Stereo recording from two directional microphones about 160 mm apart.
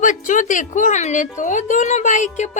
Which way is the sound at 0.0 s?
50° left (ahead or behind).